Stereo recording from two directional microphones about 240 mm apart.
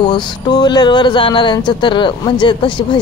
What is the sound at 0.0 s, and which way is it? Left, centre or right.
Speech, centre.